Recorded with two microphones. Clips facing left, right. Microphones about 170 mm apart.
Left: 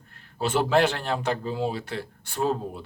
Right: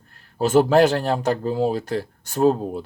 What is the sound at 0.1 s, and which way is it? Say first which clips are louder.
Speech: right 8 dB; 40° right (ahead or behind).